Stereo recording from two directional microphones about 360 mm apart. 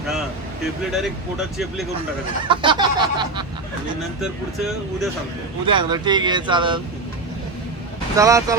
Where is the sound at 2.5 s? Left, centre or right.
Centre.